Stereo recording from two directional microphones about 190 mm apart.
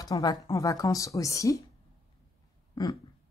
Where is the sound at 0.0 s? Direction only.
20° left (ahead or behind).